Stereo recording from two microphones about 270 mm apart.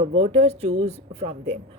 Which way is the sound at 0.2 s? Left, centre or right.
Right.